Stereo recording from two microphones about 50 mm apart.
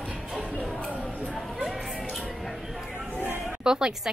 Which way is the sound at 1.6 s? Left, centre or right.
Centre.